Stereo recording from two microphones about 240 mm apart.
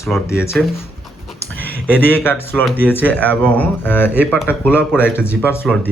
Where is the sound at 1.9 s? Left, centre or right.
Centre.